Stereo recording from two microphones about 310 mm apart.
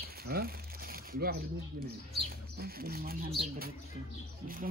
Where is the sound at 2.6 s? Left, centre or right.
Right.